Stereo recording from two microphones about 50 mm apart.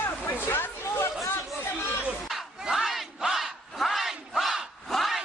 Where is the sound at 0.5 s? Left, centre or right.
Left.